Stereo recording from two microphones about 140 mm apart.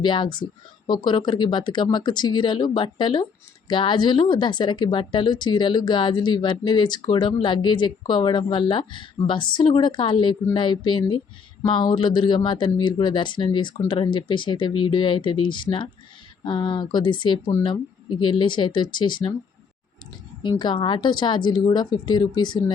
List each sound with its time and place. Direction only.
0.0 s speech: 35° left (ahead or behind)
20.4 s speech: 35° left (ahead or behind)